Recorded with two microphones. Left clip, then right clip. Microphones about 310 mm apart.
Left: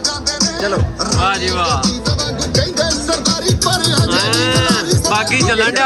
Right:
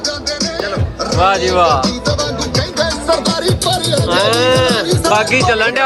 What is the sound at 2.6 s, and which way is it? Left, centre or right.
Music, centre.